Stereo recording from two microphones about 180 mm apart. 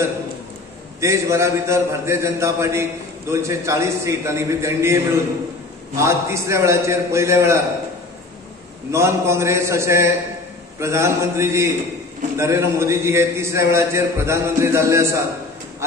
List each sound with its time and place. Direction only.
1.0 s a man's voice: 15° right (ahead or behind)
8.9 s a man's voice: 15° right (ahead or behind)